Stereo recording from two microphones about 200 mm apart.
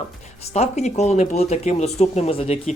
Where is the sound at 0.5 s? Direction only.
35° left (ahead or behind).